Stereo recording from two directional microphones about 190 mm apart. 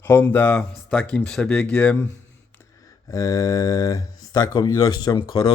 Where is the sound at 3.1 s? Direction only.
15° left (ahead or behind).